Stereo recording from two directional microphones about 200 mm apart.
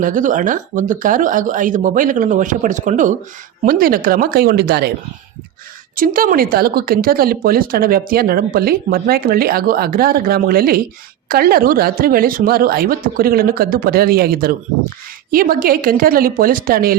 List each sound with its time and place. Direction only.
0.0 s speech: 40° right (ahead or behind)
6.0 s speech: 45° right (ahead or behind)